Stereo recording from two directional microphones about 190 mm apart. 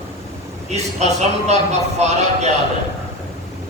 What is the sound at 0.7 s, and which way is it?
A man's voice, 35° right (ahead or behind).